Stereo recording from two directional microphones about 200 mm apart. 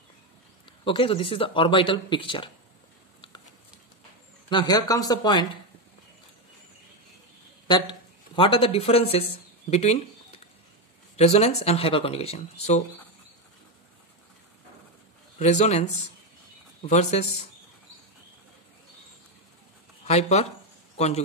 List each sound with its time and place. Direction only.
0.7 s speech: 25° left (ahead or behind)
4.5 s speech: 20° left (ahead or behind)
7.6 s speech: 20° left (ahead or behind)
11.1 s speech: 30° left (ahead or behind)
15.3 s speech: 35° left (ahead or behind)
20.1 s a man's voice: 35° left (ahead or behind)